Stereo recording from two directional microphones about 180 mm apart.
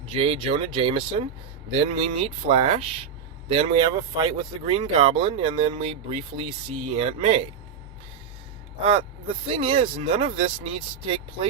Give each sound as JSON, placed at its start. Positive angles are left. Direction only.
{"t": 0.1, "sound": "speech", "side_deg": -30}
{"t": 8.8, "sound": "speech", "side_deg": -30}